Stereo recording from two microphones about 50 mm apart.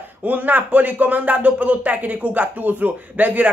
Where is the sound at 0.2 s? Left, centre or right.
Right.